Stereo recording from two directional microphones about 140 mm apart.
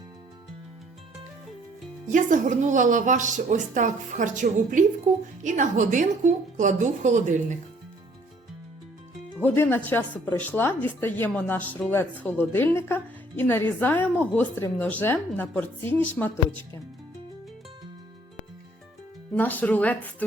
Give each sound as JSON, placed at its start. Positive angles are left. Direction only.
{"t": 2.0, "sound": "speech", "side_deg": -65}
{"t": 9.4, "sound": "a woman's voice", "side_deg": 15}
{"t": 19.3, "sound": "a woman's voice", "side_deg": 10}